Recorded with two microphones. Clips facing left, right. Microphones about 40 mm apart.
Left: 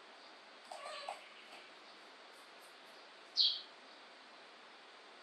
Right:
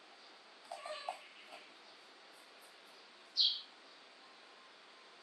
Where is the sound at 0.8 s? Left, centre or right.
Centre.